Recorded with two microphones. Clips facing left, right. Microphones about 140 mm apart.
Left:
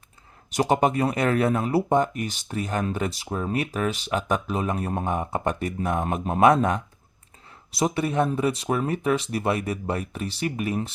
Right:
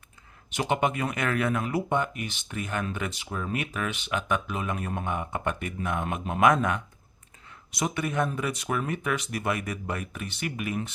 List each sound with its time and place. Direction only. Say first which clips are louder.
0.5 s speech: left 5 dB; 40° left (ahead or behind)